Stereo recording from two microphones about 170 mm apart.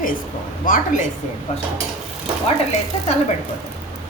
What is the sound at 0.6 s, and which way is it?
Speech, 50° left (ahead or behind).